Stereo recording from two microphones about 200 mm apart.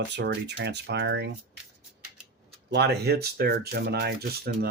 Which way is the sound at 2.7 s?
55° right (ahead or behind).